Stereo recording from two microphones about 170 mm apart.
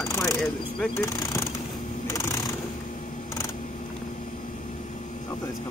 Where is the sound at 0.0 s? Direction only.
15° left (ahead or behind).